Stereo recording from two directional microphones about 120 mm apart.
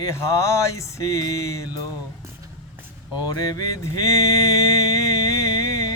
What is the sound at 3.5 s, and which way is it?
Speech, 30° left (ahead or behind).